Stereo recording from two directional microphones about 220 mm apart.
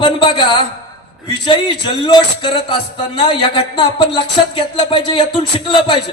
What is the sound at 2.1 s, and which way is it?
Speech, 20° left (ahead or behind).